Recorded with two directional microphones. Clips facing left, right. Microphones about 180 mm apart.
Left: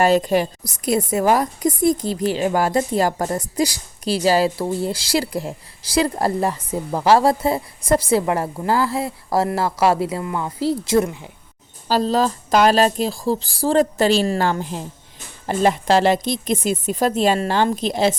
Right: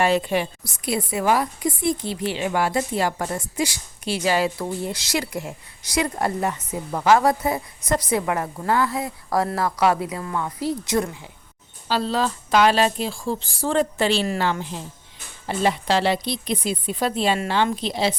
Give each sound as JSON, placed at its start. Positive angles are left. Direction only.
{"t": 0.0, "sound": "a woman's voice", "side_deg": 40}
{"t": 11.9, "sound": "speech", "side_deg": 40}